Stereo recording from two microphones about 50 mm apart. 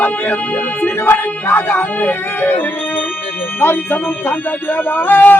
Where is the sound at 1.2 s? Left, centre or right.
Left.